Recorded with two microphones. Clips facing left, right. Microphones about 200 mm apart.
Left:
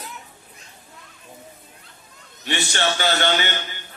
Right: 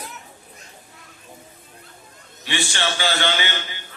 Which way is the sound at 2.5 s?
45° left (ahead or behind).